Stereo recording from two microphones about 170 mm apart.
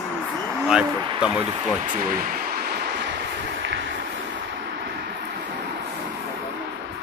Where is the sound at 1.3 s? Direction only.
50° right (ahead or behind); by 3.8 s 90° right.